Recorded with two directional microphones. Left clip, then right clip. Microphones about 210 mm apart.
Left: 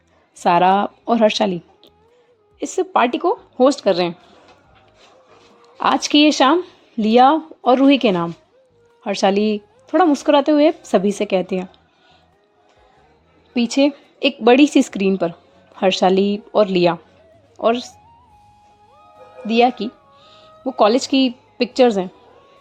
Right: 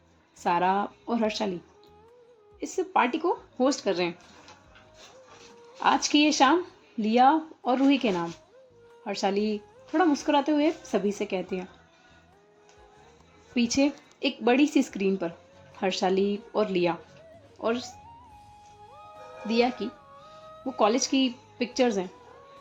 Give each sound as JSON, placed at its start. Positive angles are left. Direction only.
{"t": 0.3, "sound": "speech", "side_deg": 45}
{"t": 5.7, "sound": "speech", "side_deg": 50}
{"t": 13.5, "sound": "a woman's voice", "side_deg": 35}
{"t": 19.5, "sound": "speech", "side_deg": 40}
{"t": 20.7, "sound": "a woman's voice", "side_deg": 40}